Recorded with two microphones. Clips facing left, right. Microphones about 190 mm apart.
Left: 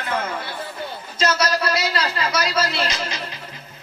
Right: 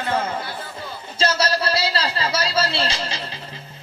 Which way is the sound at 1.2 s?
30° right (ahead or behind).